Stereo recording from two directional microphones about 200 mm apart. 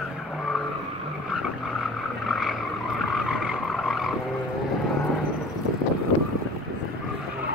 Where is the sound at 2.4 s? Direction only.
Centre (ahead or behind).